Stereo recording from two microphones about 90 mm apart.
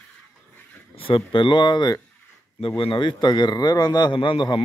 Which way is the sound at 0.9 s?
85° left.